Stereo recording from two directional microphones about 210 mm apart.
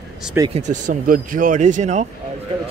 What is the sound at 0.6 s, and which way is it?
Speech, 35° right (ahead or behind).